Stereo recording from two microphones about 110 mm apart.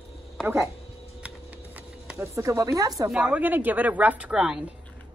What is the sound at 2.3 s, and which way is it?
Speech, 30° right (ahead or behind).